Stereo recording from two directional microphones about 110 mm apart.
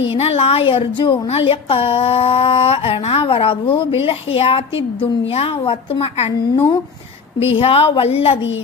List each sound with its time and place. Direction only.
0.1 s speech: 65° left (ahead or behind)